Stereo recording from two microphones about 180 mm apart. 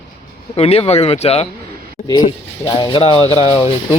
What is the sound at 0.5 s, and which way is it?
Speech, 35° left (ahead or behind).